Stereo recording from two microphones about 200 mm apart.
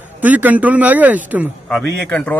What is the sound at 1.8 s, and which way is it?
Speech, 60° right (ahead or behind).